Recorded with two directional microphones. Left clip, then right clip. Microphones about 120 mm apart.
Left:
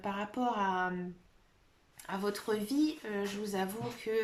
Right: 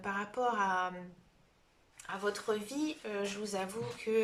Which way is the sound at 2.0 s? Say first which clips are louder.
Even; 45° left (ahead or behind).